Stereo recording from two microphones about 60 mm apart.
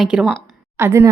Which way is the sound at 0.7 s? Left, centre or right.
Right.